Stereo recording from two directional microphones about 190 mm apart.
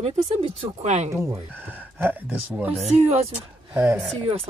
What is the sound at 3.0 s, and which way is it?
Speech, 35° right (ahead or behind).